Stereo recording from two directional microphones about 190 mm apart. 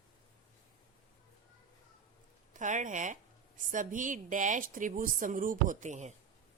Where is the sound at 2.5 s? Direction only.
40° right (ahead or behind).